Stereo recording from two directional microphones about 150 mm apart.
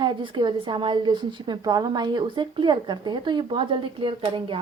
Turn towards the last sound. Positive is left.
turn(degrees=-35)  # may be behind; listen again after turning